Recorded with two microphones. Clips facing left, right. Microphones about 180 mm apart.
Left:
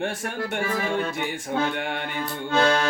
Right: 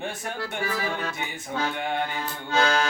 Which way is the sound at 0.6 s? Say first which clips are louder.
Left 2 dB; 50° left (ahead or behind).